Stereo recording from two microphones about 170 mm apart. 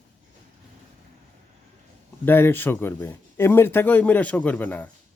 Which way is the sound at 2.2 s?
15° left (ahead or behind).